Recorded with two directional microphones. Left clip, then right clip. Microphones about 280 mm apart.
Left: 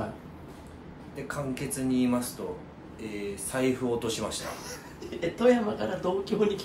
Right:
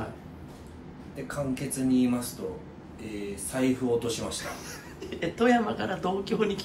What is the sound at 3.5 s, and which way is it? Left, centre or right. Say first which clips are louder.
Speech: right 1 dB; centre.